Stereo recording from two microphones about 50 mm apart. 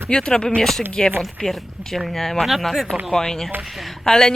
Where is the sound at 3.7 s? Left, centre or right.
Centre.